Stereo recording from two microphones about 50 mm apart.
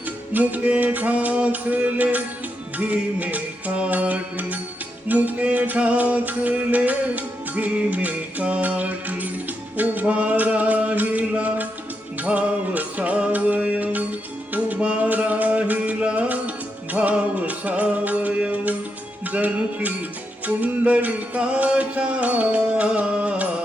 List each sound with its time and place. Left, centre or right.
0.3 s music: right